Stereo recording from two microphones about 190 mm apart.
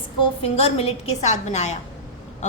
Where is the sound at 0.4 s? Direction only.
30° left (ahead or behind).